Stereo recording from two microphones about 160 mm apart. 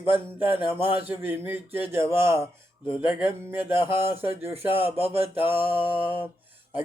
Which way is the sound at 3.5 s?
15° right (ahead or behind).